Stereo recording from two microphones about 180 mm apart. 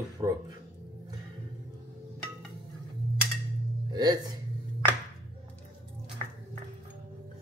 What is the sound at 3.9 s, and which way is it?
Speech, 20° right (ahead or behind).